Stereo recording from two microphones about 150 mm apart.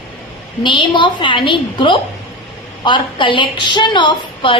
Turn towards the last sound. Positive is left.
turn(degrees=35)  # may be behind; listen again after turning